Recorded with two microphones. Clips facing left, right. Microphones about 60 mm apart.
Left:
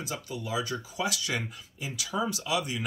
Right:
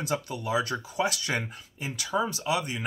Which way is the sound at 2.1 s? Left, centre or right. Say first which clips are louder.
Right 2 dB; right.